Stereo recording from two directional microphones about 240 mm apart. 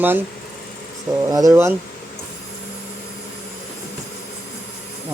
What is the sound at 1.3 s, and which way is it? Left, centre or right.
Speech, centre.